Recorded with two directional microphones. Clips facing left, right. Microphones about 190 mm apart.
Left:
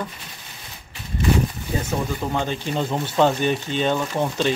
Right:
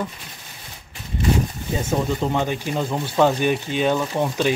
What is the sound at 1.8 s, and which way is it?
Speech, 25° right (ahead or behind).